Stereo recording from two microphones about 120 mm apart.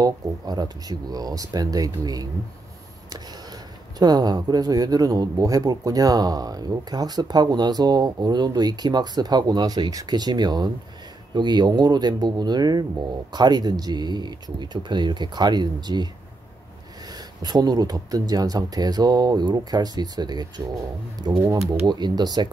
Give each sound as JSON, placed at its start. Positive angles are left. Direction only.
{"t": 0.0, "sound": "speech", "side_deg": -35}
{"t": 4.0, "sound": "speech", "side_deg": -35}
{"t": 17.4, "sound": "speech", "side_deg": -35}
{"t": 21.5, "sound": "speech", "side_deg": -25}
{"t": 21.8, "sound": "speech", "side_deg": -35}